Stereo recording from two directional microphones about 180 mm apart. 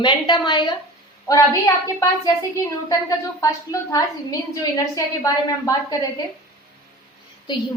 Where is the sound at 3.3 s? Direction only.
15° left (ahead or behind).